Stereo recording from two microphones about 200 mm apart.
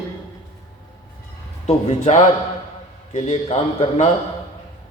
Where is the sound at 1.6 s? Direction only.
35° left (ahead or behind).